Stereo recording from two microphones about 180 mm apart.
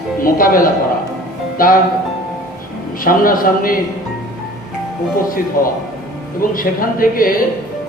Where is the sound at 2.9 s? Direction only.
50° left (ahead or behind).